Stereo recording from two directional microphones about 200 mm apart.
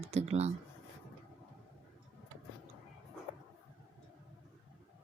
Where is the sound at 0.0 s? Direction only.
30° right (ahead or behind).